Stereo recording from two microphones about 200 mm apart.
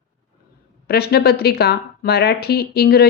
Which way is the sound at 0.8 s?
55° left (ahead or behind).